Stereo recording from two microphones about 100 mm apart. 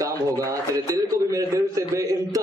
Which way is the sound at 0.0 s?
35° right (ahead or behind).